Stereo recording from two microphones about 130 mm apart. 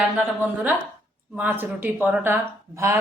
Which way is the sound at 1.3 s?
15° right (ahead or behind).